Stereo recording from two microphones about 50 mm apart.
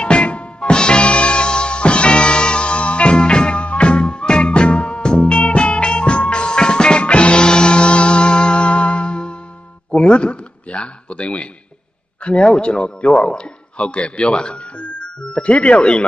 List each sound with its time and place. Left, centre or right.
0.0 s music: left
9.8 s a man's voice: centre